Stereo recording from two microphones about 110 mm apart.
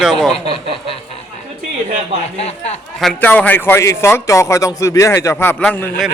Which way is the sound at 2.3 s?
75° left (ahead or behind).